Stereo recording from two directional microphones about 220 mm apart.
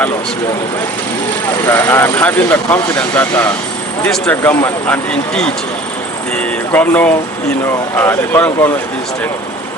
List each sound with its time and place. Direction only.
1.6 s speech: 10° left (ahead or behind)